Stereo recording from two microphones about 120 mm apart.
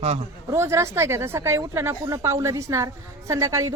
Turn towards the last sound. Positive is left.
turn(degrees=-25)  # may be behind; listen again after turning